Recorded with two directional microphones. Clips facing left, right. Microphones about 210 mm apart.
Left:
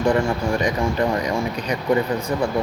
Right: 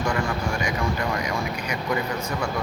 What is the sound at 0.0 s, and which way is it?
Speech, 30° left (ahead or behind).